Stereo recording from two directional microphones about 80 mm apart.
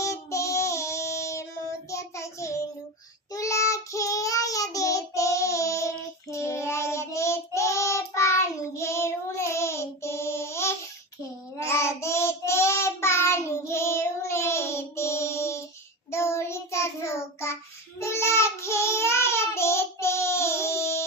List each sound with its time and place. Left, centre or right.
0.0 s child singing: left